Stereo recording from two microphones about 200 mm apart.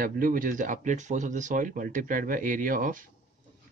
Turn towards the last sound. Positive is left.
turn(degrees=-40)  # may be behind; listen again after turning